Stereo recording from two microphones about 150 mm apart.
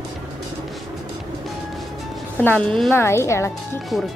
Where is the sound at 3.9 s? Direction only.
Centre (ahead or behind).